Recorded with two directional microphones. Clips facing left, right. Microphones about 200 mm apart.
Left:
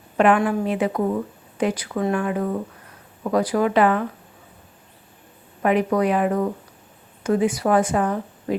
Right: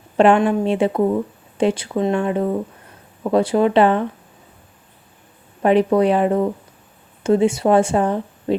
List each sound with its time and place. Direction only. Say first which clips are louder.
0.2 s a woman's voice: right 4 dB; 25° right (ahead or behind)
5.6 s a woman's voice: right 5 dB; 30° right (ahead or behind)